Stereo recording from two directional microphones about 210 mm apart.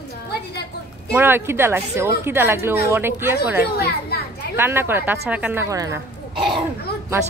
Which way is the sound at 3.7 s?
50° left (ahead or behind).